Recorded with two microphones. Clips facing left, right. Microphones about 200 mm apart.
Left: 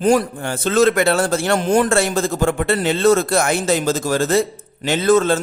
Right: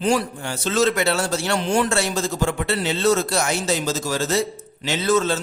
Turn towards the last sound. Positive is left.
turn(degrees=55)  # may be behind; listen again after turning